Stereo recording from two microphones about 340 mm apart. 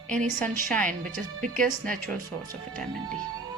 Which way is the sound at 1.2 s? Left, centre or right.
Right.